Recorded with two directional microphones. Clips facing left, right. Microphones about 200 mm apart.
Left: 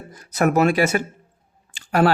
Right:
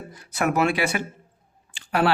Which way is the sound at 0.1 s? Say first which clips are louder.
Left 5 dB; 40° left (ahead or behind).